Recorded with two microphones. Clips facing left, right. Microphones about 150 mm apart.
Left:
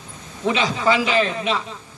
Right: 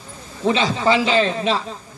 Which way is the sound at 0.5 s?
30° right (ahead or behind).